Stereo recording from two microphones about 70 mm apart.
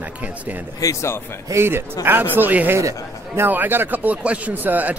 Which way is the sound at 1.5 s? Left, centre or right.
Right.